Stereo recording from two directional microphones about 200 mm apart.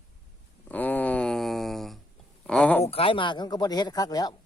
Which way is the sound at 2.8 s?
30° left (ahead or behind).